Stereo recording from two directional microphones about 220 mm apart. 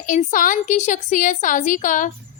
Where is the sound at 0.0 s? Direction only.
35° left (ahead or behind).